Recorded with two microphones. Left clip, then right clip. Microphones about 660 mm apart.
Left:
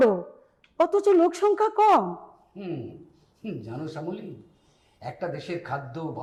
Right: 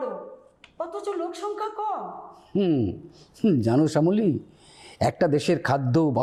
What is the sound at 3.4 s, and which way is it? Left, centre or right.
A man's voice, right.